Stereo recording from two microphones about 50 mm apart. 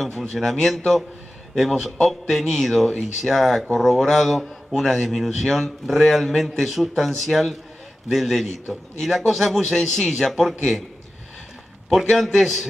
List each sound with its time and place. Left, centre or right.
0.1 s speech: centre
12.1 s speech: centre